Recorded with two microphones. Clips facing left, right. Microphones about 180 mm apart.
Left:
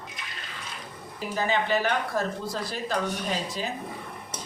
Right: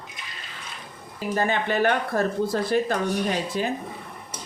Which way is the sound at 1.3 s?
55° right (ahead or behind).